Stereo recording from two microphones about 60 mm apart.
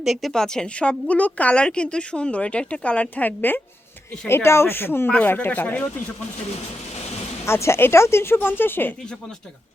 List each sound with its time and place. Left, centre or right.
0.0 s a woman's voice: centre; by 3.6 s left
4.3 s a woman's voice: left
7.4 s speech: left